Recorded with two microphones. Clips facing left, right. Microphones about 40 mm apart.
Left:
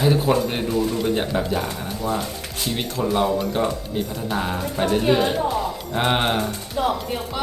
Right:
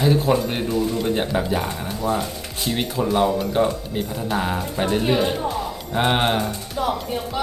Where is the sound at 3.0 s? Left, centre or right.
Centre.